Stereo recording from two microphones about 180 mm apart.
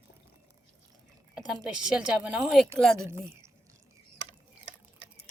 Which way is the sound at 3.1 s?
15° right (ahead or behind).